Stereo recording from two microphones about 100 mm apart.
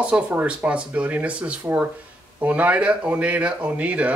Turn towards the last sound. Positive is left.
turn(degrees=-15)  # may be behind; listen again after turning